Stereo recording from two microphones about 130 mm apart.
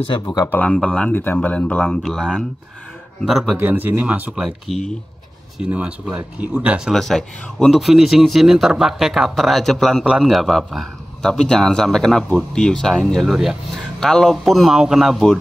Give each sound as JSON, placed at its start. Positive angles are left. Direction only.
{"t": 0.2, "sound": "speech", "side_deg": 30}
{"t": 0.5, "sound": "speech", "side_deg": 10}
{"t": 3.5, "sound": "speech", "side_deg": -15}
{"t": 4.6, "sound": "speech", "side_deg": 0}
{"t": 5.6, "sound": "speech", "side_deg": -10}
{"t": 6.9, "sound": "speech", "side_deg": 0}